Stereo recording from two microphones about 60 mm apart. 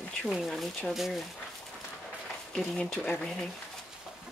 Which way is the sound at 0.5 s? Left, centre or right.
Centre.